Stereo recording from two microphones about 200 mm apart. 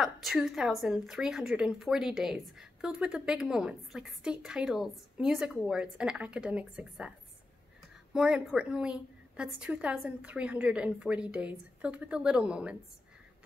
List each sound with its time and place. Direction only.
0.0 s a woman's voice: centre (ahead or behind)
8.1 s a woman's voice: 5° right (ahead or behind)